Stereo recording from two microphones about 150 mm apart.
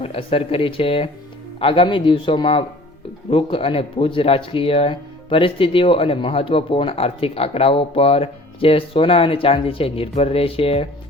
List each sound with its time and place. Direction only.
0.0 s speech: 40° left (ahead or behind)